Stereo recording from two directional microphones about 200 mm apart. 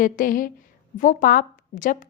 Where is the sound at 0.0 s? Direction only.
45° left (ahead or behind).